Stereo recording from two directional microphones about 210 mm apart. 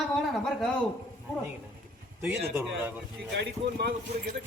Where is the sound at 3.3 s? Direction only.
55° right (ahead or behind).